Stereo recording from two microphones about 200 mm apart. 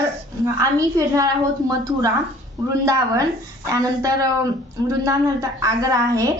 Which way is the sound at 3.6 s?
15° right (ahead or behind).